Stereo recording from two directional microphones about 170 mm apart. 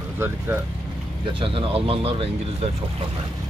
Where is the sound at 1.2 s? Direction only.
30° right (ahead or behind).